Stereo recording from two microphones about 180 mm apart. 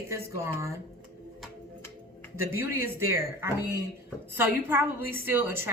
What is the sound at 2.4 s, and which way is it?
A woman's voice, 15° right (ahead or behind).